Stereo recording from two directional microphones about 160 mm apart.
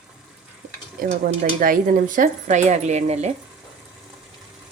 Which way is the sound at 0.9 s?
60° right (ahead or behind).